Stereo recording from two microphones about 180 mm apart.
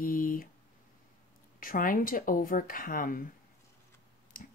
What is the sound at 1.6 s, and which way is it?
Speech, 50° left (ahead or behind).